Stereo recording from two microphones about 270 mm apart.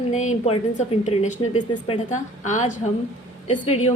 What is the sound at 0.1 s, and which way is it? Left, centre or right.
Speech, left.